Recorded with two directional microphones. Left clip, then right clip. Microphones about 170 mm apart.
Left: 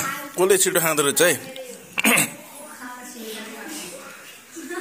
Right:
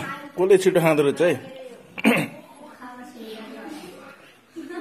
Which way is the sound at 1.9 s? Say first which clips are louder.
Left 2 dB; 10° right (ahead or behind).